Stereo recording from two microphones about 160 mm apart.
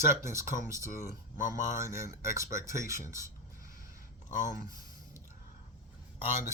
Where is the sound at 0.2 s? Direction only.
20° right (ahead or behind).